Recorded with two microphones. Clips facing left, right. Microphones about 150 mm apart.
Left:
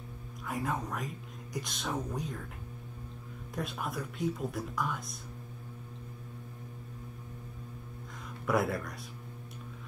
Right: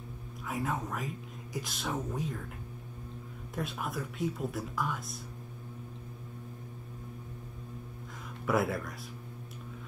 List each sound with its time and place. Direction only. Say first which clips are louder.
0.5 s speech: even; centre (ahead or behind)
3.5 s speech: even; centre (ahead or behind)
8.5 s speech: even; centre (ahead or behind)